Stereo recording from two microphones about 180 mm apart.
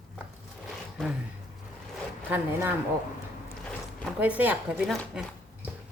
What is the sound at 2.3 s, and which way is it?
Speech, 10° right (ahead or behind).